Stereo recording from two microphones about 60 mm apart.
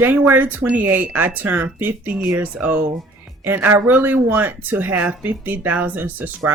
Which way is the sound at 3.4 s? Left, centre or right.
Right.